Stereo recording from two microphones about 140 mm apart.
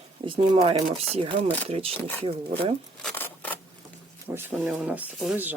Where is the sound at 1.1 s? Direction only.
40° right (ahead or behind).